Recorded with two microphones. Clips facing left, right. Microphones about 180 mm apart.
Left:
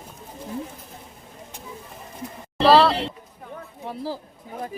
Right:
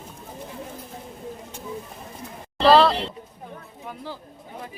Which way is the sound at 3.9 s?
35° left (ahead or behind).